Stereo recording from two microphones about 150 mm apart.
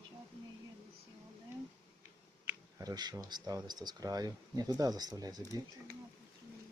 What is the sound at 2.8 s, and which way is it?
Speech, 25° right (ahead or behind).